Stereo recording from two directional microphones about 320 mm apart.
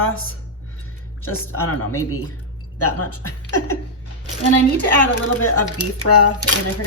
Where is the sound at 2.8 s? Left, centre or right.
Left.